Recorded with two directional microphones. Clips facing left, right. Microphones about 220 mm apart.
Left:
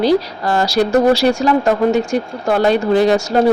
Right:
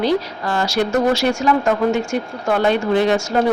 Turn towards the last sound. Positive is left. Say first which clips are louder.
# left 3 dB
turn(degrees=35)  # may be behind; listen again after turning